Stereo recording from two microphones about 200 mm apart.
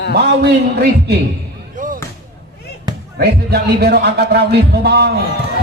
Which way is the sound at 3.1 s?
50° right (ahead or behind).